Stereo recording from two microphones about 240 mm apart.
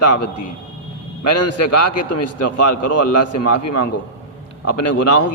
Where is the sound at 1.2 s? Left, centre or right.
Left.